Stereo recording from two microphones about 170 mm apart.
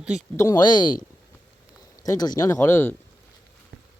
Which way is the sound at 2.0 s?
20° left (ahead or behind).